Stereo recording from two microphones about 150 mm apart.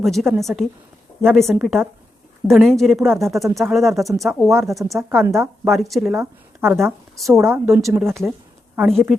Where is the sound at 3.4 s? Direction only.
20° right (ahead or behind).